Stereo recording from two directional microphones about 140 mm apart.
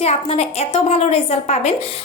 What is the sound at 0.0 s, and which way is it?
A woman's voice, 50° left (ahead or behind).